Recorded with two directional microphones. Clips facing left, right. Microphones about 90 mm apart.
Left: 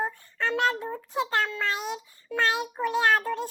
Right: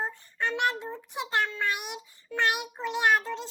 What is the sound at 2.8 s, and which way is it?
Child singing, 20° right (ahead or behind).